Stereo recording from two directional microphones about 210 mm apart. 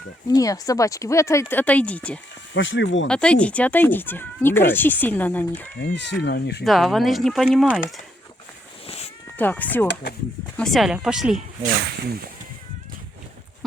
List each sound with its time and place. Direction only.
0.3 s speech: 15° left (ahead or behind)
2.5 s speech: 60° left (ahead or behind)
3.1 s speech: 5° left (ahead or behind)
5.8 s speech: 60° left (ahead or behind)
6.7 s speech: centre (ahead or behind)
9.4 s speech: 10° left (ahead or behind)
9.8 s speech: 50° left (ahead or behind)
10.6 s speech: centre (ahead or behind)